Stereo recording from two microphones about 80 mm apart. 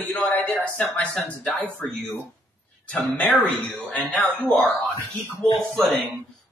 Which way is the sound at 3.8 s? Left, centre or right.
Left.